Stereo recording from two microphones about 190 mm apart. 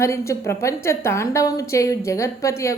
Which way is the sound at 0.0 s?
15° left (ahead or behind).